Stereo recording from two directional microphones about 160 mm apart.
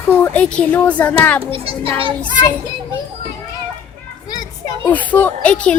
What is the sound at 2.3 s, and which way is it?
Speech, 25° left (ahead or behind).